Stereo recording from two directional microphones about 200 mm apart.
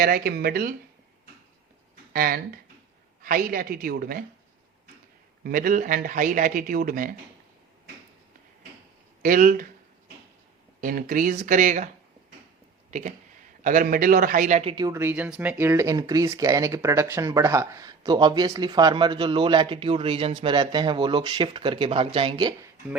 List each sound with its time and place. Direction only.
0.0 s a man's voice: 50° right (ahead or behind)
2.1 s a man's voice: 45° right (ahead or behind)
5.4 s a man's voice: 45° right (ahead or behind)
9.2 s a man's voice: 45° right (ahead or behind)
10.8 s a man's voice: 45° right (ahead or behind)
12.9 s a man's voice: 40° right (ahead or behind)
14.8 s speech: 10° right (ahead or behind)